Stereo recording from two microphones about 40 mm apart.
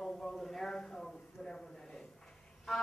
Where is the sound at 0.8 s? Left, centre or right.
Centre.